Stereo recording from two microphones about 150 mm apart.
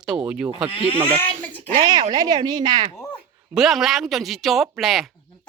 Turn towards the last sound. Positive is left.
turn(degrees=0)  # may be behind; listen again after turning